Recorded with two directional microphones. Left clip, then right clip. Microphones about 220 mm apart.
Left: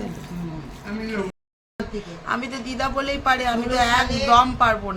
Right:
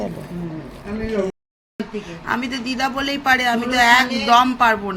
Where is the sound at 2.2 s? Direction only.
10° right (ahead or behind).